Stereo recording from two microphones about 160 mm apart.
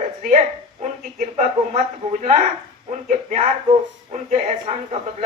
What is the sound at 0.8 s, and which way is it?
Speech, 50° right (ahead or behind).